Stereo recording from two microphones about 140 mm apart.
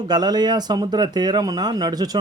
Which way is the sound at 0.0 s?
30° right (ahead or behind).